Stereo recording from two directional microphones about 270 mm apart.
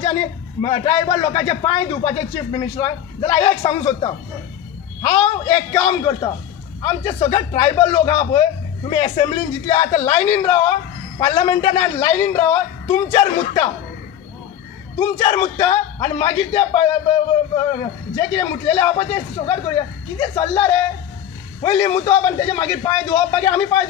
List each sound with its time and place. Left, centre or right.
0.0 s a man's voice: left
15.1 s a man's voice: left
18.1 s a man's voice: centre
22.6 s a man's voice: centre
23.0 s a man's voice: left